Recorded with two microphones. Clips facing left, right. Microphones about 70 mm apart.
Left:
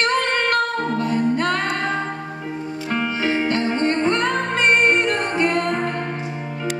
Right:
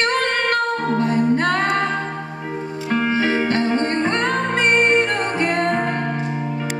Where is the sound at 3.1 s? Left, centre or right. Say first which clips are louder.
Right 1 dB; right.